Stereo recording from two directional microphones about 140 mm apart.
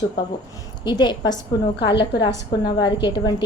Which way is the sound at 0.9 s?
30° left (ahead or behind).